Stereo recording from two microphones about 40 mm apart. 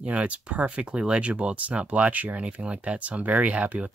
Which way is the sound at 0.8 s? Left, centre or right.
Right.